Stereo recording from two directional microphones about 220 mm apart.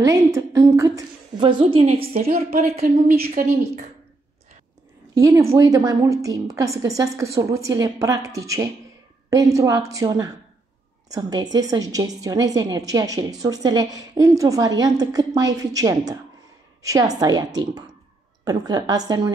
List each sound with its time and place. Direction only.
0.0 s a woman's voice: 15° right (ahead or behind)
2.8 s a woman's voice: 45° right (ahead or behind)
5.5 s a woman's voice: 15° right (ahead or behind)